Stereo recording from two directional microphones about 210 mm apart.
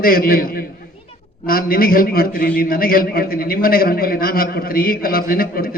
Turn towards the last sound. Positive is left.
turn(degrees=45)  # may be behind; listen again after turning